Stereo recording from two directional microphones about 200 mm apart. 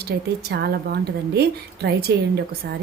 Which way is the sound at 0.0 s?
55° right (ahead or behind).